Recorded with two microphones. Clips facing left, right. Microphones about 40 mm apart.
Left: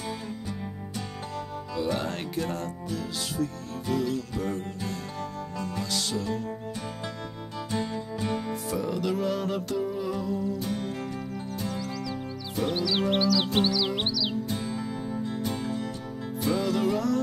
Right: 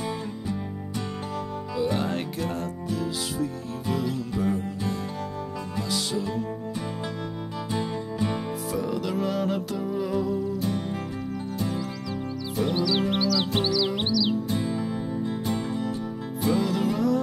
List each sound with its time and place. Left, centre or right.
1.9 s music: centre
8.6 s music: centre
12.5 s music: centre
14.5 s music: centre
16.4 s music: centre